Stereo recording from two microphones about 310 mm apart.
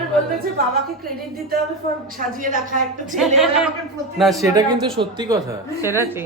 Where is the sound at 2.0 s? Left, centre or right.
Right.